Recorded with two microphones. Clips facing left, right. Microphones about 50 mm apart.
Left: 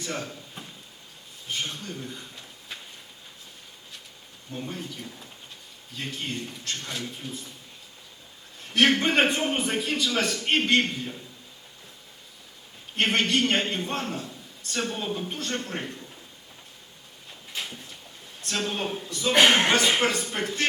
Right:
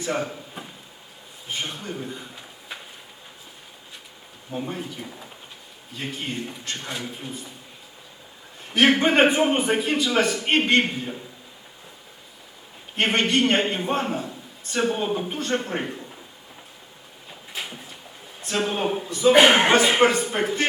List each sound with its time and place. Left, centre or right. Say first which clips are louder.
0.0 s a man's voice: right 7 dB; centre
4.5 s a man's voice: right 5 dB; centre
8.6 s a man's voice: right 3 dB; centre
13.0 s a man's voice: right 3 dB; centre
17.5 s a sound: right 2 dB; centre
18.3 s a man's voice: right 5 dB; centre